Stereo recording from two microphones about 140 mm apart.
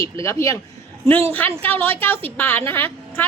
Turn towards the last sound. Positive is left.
turn(degrees=15)  # may be behind; listen again after turning